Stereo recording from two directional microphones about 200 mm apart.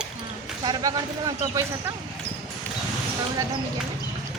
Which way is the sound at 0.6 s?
20° right (ahead or behind).